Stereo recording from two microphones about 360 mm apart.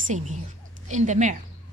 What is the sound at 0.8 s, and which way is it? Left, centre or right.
Speech, centre.